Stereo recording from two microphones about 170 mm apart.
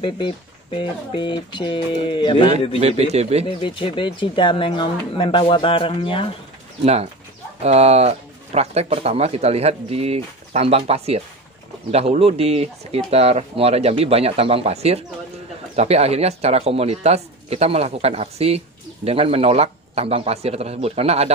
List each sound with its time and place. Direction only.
0.0 s speech: 30° left (ahead or behind)
3.0 s speech: 40° right (ahead or behind)
3.4 s speech: 30° left (ahead or behind)
6.8 s speech: 35° right (ahead or behind)